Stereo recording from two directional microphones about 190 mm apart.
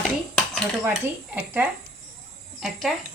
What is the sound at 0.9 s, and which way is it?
Speech, 10° right (ahead or behind).